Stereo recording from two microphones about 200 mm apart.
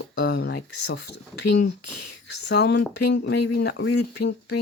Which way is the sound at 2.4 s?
55° left (ahead or behind).